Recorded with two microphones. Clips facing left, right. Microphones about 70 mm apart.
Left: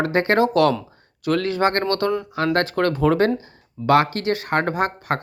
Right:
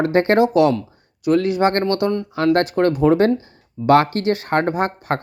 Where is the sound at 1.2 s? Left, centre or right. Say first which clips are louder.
Right 4 dB; left.